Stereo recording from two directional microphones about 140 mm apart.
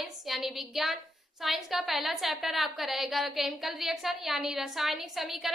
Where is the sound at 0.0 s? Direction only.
Centre (ahead or behind).